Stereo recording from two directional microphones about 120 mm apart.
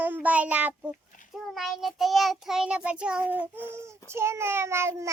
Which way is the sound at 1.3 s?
Centre (ahead or behind).